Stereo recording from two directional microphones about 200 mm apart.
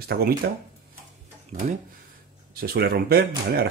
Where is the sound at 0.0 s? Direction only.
50° right (ahead or behind).